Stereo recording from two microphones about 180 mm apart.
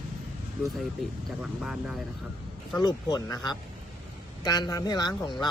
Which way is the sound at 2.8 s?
20° left (ahead or behind).